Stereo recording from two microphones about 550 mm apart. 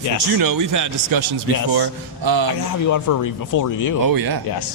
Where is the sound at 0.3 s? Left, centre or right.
Right.